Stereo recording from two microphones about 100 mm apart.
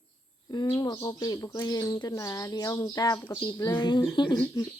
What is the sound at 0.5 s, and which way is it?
Speech, 45° left (ahead or behind).